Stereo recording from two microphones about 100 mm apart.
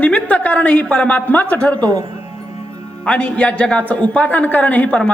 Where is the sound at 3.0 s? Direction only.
10° left (ahead or behind).